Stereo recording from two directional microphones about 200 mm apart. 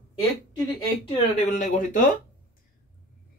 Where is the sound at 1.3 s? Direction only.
40° left (ahead or behind).